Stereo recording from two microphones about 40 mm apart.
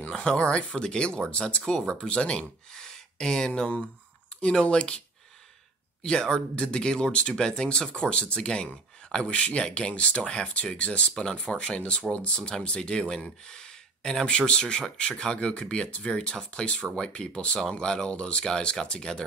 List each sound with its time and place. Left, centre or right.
0.1 s speech: left
2.7 s speech: centre
6.0 s speech: centre